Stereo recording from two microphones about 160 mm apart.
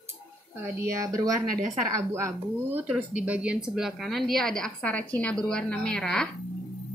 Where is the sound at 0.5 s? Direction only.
20° right (ahead or behind); by 6.3 s 5° left (ahead or behind).